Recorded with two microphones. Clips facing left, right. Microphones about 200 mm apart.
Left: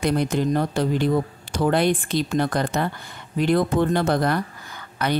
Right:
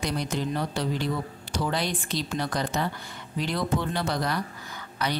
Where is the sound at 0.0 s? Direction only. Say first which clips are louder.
Left 8 dB; 55° left (ahead or behind).